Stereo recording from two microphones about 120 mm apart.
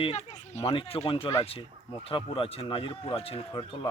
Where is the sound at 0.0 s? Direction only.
70° left (ahead or behind).